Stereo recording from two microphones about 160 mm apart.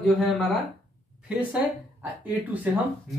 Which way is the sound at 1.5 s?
10° right (ahead or behind).